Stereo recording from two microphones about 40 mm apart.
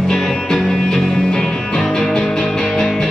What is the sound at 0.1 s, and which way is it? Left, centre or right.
Music, centre.